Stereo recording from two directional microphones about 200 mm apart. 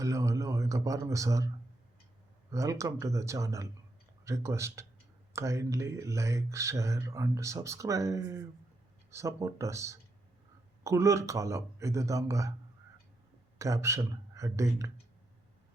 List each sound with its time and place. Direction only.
0.0 s a sound: 15° right (ahead or behind)
2.5 s speech: 15° right (ahead or behind)
13.6 s speech: 15° right (ahead or behind)